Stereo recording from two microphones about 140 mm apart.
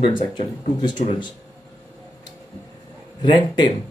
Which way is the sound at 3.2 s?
35° left (ahead or behind).